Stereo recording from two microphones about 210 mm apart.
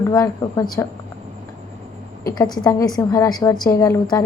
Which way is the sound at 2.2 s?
20° left (ahead or behind).